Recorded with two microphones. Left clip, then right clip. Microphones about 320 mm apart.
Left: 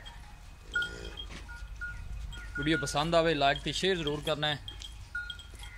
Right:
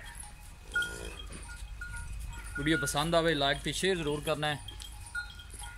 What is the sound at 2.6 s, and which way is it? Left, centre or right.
Speech, centre.